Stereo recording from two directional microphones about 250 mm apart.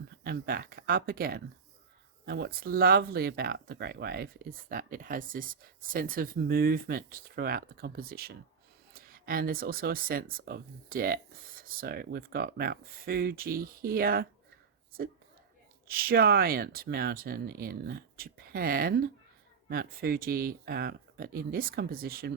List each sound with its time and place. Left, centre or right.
0.3 s speech: right
15.9 s speech: right